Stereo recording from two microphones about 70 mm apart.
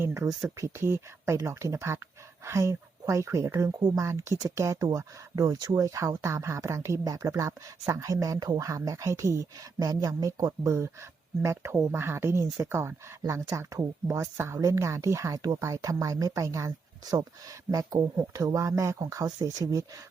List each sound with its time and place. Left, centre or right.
0.1 s speech: right
4.9 s speech: right
5.8 s speech: right
19.2 s speech: right